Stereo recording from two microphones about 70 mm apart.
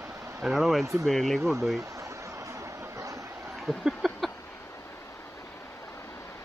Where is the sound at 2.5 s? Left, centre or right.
Right.